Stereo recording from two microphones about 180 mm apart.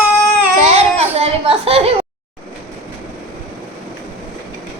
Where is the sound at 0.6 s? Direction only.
35° right (ahead or behind).